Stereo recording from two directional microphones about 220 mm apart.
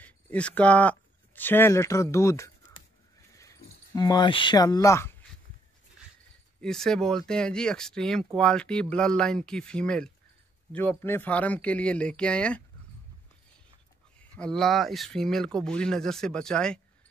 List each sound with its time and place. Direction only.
0.0 s speech: 5° left (ahead or behind)
6.6 s speech: centre (ahead or behind)
14.3 s speech: 5° left (ahead or behind)